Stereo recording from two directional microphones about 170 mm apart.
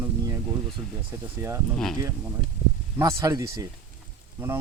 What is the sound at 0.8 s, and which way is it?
Speech, 25° right (ahead or behind).